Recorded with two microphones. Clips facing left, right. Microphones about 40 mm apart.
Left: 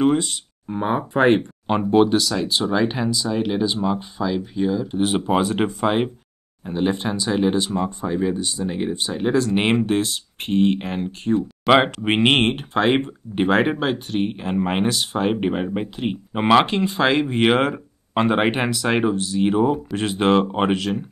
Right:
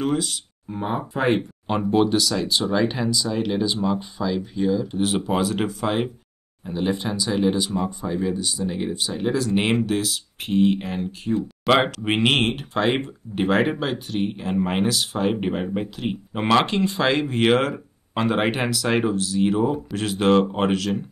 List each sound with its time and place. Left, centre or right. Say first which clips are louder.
0.0 s speech: left 5 dB; centre